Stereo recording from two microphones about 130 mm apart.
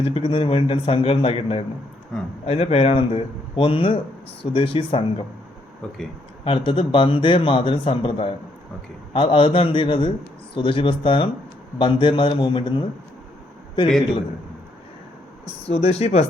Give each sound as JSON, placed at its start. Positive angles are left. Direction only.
{"t": 0.1, "sound": "a man's voice", "side_deg": 45}
{"t": 2.1, "sound": "speech", "side_deg": 5}
{"t": 2.5, "sound": "a man's voice", "side_deg": 50}
{"t": 6.4, "sound": "a man's voice", "side_deg": 45}
{"t": 15.6, "sound": "speech", "side_deg": 55}